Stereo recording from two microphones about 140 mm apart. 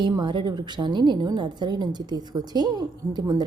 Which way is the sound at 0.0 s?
35° right (ahead or behind).